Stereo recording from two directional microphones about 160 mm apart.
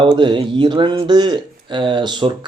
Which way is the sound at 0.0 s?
30° right (ahead or behind).